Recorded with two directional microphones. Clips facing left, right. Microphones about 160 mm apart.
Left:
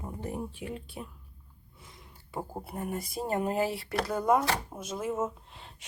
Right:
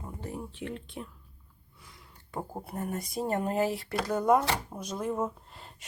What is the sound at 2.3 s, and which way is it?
Speech, centre (ahead or behind).